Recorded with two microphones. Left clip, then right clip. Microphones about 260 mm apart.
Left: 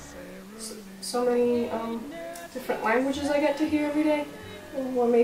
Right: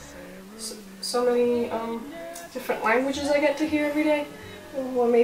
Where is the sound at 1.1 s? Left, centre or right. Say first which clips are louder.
Right 2 dB; centre.